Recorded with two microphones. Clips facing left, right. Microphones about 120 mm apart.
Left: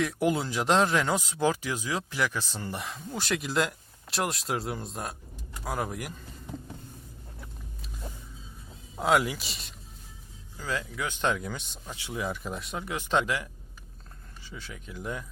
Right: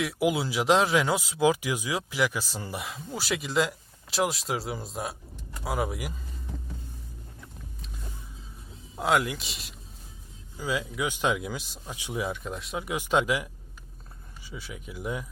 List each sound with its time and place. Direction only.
0.0 s speech: 5° right (ahead or behind)
9.0 s speech: centre (ahead or behind)
10.6 s speech: 15° right (ahead or behind)
11.9 s speech: 15° right (ahead or behind)
12.2 s speech: centre (ahead or behind)
12.8 s speech: 10° right (ahead or behind)